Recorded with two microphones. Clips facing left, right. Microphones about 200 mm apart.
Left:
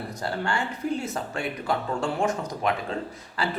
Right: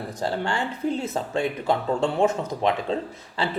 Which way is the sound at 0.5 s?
25° right (ahead or behind).